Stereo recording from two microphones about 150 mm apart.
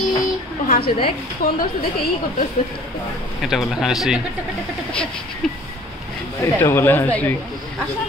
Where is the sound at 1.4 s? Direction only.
75° left (ahead or behind).